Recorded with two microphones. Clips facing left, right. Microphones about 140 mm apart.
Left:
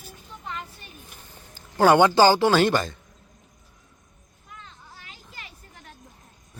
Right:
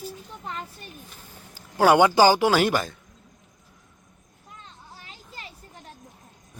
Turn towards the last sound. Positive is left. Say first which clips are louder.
# right 3 dB
turn(degrees=-30)  # may be behind; listen again after turning